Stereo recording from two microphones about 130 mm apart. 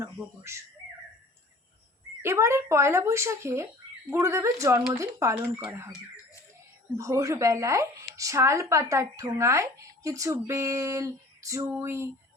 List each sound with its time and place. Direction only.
0.0 s speech: 20° right (ahead or behind)
2.2 s speech: 20° right (ahead or behind)
6.9 s speech: 25° right (ahead or behind)